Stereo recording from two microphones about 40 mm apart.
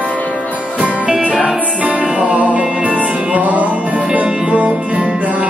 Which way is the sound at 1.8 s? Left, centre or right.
Right.